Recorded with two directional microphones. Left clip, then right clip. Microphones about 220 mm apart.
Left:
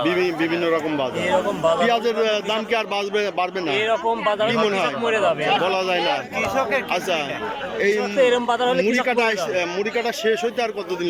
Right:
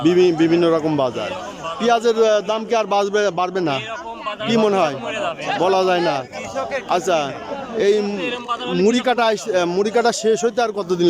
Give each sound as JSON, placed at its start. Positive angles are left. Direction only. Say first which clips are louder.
{"t": 0.0, "sound": "a man's voice", "louder": "right 6 dB", "side_deg": -15}
{"t": 8.2, "sound": "speech", "louder": "left 7 dB", "side_deg": 30}
{"t": 9.0, "sound": "speech", "louder": "right 2 dB", "side_deg": -20}